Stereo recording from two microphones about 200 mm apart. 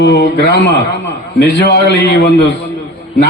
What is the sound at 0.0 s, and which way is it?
A man's voice, 55° left (ahead or behind).